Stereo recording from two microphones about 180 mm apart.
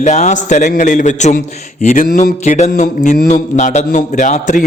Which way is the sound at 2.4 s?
40° left (ahead or behind).